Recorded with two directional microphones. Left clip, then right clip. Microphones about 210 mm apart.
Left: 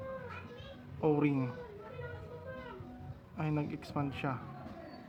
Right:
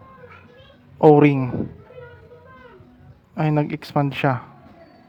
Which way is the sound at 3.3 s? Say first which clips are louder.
Right 15 dB; 50° right (ahead or behind).